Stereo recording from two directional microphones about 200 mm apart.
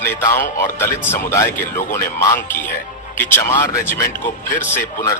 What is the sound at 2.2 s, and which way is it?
Speech, 15° left (ahead or behind).